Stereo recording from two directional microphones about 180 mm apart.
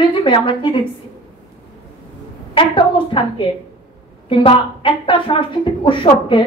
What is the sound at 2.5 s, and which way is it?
A woman's voice, 30° left (ahead or behind).